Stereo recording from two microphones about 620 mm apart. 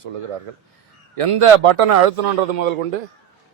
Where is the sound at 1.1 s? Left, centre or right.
Right.